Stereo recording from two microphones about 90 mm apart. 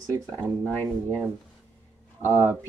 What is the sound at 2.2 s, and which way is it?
Speech, 25° right (ahead or behind).